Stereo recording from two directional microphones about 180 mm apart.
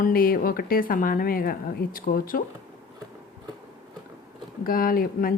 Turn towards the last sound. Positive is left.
turn(degrees=55)  # may be behind; listen again after turning